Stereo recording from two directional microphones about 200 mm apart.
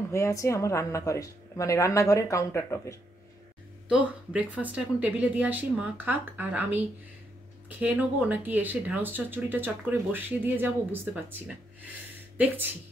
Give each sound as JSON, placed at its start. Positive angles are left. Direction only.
{"t": 0.1, "sound": "speech", "side_deg": 15}
{"t": 3.9, "sound": "speech", "side_deg": -5}
{"t": 7.8, "sound": "speech", "side_deg": -10}